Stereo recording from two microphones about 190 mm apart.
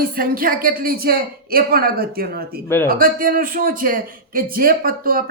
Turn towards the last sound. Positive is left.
turn(degrees=-50)  # may be behind; listen again after turning